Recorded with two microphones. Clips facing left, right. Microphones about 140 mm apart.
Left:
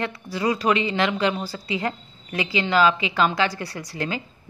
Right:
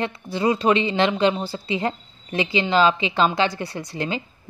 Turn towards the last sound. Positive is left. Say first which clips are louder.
# right 2 dB
turn(degrees=-20)  # may be behind; listen again after turning